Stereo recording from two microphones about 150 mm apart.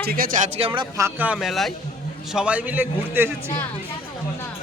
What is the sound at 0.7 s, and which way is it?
Speech, 30° right (ahead or behind).